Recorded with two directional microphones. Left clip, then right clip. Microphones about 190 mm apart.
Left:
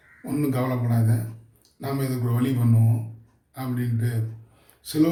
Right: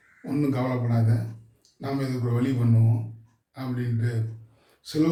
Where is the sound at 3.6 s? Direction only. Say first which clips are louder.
Left 2 dB; 15° left (ahead or behind).